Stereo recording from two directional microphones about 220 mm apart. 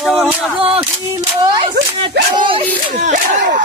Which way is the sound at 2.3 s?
20° right (ahead or behind).